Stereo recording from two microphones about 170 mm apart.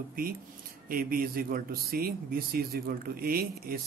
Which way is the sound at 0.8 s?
55° right (ahead or behind).